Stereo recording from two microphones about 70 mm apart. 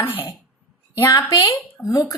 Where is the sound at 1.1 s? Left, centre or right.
Left.